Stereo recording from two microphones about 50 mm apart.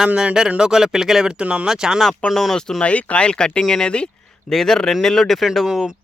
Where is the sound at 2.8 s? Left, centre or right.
Left; by 5.5 s centre.